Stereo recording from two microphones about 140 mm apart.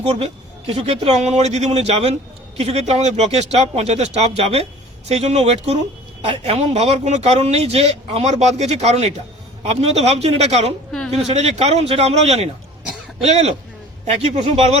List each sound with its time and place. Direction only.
0.0 s speech: 50° right (ahead or behind)
12.8 s throat clearing: centre (ahead or behind)
13.2 s speech: 50° right (ahead or behind)